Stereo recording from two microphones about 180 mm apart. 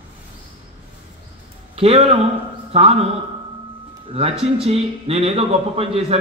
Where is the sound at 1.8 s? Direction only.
35° right (ahead or behind).